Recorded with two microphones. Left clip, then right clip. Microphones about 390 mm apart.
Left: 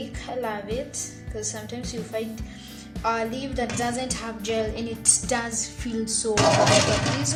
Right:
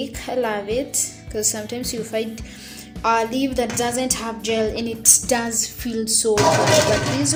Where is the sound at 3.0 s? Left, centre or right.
Left.